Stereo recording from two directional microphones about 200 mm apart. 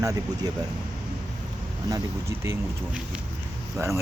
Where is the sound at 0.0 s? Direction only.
15° right (ahead or behind).